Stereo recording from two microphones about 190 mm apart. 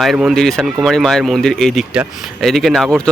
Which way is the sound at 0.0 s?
Centre (ahead or behind).